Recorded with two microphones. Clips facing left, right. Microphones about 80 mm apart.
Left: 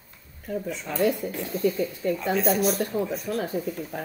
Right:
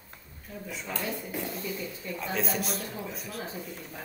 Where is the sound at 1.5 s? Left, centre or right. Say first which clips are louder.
Left 11 dB; left.